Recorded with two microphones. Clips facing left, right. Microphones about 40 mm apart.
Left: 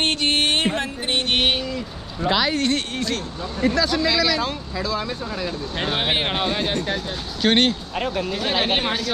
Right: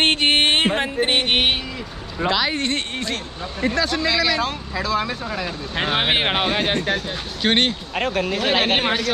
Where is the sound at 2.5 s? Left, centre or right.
Right.